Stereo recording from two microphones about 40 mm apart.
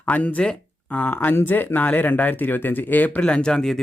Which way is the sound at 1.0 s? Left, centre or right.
Left.